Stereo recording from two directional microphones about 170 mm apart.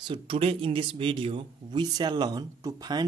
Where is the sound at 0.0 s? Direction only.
30° right (ahead or behind).